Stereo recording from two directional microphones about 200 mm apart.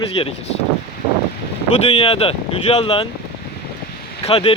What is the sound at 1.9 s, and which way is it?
Speech, 30° left (ahead or behind).